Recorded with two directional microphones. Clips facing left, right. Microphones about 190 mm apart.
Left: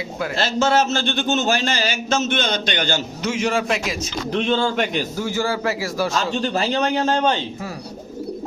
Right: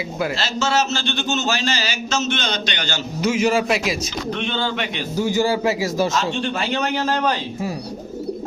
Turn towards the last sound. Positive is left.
turn(degrees=25)  # may be behind; listen again after turning